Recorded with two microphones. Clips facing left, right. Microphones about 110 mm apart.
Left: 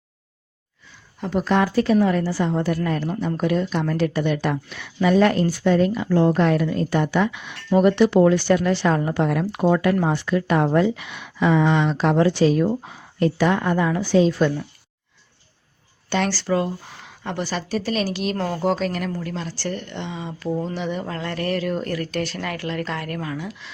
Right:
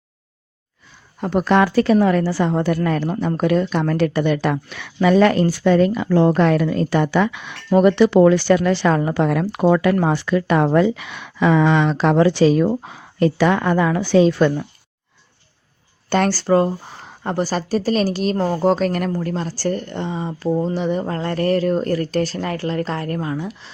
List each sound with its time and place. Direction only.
1.2 s a woman's voice: 60° right (ahead or behind)
16.0 s speech: 45° right (ahead or behind)